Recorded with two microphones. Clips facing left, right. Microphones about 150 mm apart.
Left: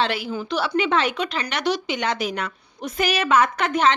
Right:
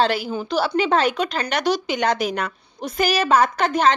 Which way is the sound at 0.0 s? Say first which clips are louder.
Right 3 dB; 40° right (ahead or behind).